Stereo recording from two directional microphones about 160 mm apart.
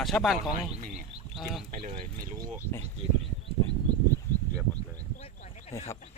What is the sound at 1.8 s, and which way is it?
Speech, 35° right (ahead or behind).